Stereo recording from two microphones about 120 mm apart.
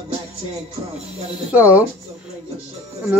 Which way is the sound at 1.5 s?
10° right (ahead or behind).